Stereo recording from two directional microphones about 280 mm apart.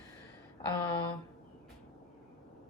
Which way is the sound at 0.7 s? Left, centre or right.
Centre.